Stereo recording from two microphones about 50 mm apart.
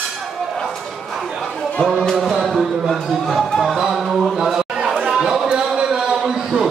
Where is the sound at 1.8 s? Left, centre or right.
Centre.